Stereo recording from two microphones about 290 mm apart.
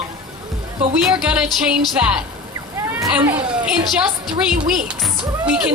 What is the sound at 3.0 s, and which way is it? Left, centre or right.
Speech, centre.